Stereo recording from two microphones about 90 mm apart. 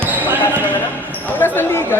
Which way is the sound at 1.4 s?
25° left (ahead or behind).